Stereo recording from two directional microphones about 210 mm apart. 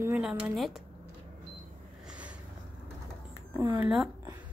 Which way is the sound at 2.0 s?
5° right (ahead or behind).